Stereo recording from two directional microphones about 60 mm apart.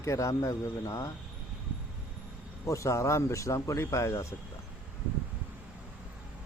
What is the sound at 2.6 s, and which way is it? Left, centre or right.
Speech, left.